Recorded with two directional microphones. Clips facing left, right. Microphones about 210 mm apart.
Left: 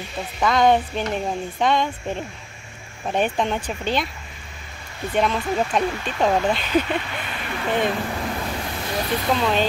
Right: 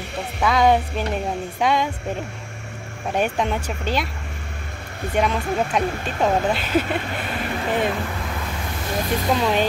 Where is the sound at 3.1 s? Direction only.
5° right (ahead or behind).